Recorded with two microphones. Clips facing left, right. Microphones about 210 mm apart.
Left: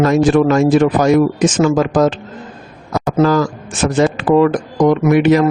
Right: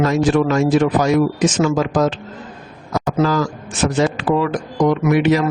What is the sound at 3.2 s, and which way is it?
A man's voice, 50° left (ahead or behind).